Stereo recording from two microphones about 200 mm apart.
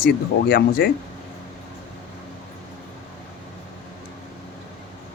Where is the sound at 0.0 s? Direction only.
50° left (ahead or behind).